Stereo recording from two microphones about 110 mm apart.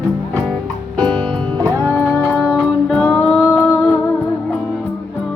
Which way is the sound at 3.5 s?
25° left (ahead or behind).